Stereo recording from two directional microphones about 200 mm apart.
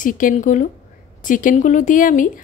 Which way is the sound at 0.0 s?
40° left (ahead or behind).